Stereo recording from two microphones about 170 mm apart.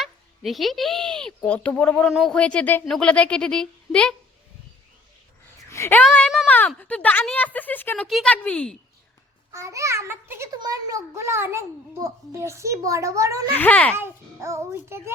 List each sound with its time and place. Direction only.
0.0 s speech: centre (ahead or behind)
5.6 s a sound: 15° left (ahead or behind)
6.1 s a sound: centre (ahead or behind)
6.5 s speech: 10° left (ahead or behind)
9.5 s a child's voice: 15° right (ahead or behind)
13.5 s speech: 10° left (ahead or behind)
13.9 s a child's voice: 15° right (ahead or behind)